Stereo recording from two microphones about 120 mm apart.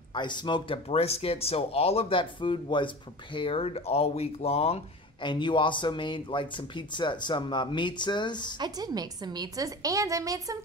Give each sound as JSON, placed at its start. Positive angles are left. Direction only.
{"t": 0.1, "sound": "speech", "side_deg": 40}
{"t": 5.2, "sound": "speech", "side_deg": 40}
{"t": 8.5, "sound": "a woman's voice", "side_deg": -35}